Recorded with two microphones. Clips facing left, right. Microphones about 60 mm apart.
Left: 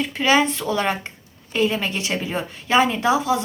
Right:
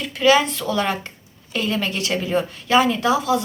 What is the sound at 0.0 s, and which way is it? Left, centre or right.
Speech, left.